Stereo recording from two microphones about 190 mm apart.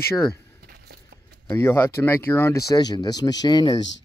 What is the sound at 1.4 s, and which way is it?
Speech, 10° left (ahead or behind).